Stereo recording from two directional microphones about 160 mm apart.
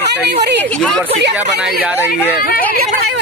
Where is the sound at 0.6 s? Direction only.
5° left (ahead or behind).